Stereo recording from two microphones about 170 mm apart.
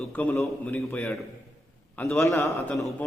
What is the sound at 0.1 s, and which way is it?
A man's voice, 10° left (ahead or behind).